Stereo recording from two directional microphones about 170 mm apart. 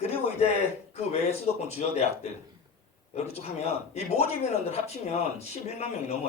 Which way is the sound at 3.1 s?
40° left (ahead or behind).